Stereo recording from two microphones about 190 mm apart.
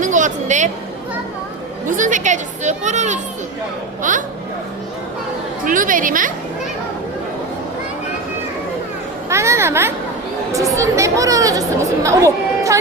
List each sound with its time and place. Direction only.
0.0 s a sound: 40° right (ahead or behind)
1.9 s speech: 45° right (ahead or behind)
5.6 s a woman's voice: 45° right (ahead or behind)
9.3 s speech: 15° right (ahead or behind)